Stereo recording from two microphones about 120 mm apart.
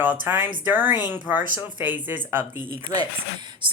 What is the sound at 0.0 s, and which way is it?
Speech, 15° right (ahead or behind).